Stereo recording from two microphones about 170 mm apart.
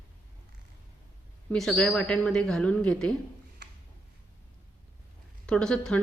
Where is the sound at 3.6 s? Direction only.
80° right.